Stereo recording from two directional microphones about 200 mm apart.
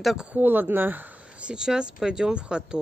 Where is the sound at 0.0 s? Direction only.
5° right (ahead or behind).